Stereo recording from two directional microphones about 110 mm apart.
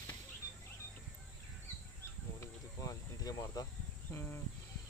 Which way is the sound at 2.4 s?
30° left (ahead or behind).